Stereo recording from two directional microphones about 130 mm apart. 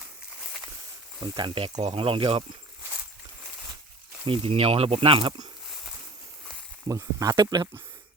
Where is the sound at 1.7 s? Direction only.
50° right (ahead or behind).